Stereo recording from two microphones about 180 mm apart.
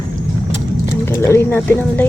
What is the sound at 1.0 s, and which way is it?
Speech, 15° left (ahead or behind).